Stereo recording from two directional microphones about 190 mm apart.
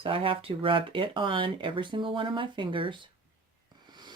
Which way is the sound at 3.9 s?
20° right (ahead or behind).